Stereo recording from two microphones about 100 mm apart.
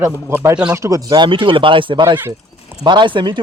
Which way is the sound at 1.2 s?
60° right (ahead or behind).